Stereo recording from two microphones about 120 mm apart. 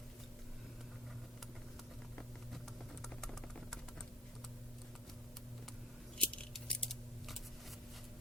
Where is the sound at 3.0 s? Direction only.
5° left (ahead or behind).